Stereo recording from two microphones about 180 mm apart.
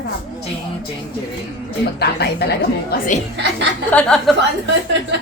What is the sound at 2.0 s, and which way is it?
A woman's voice, 65° left (ahead or behind).